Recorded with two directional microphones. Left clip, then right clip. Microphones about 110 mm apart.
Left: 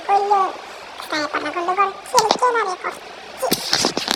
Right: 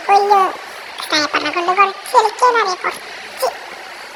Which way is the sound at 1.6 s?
55° right (ahead or behind).